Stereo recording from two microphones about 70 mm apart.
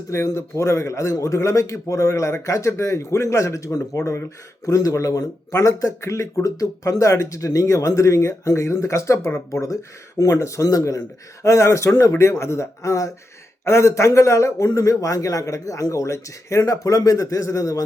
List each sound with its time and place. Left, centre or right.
0.1 s a man's voice: left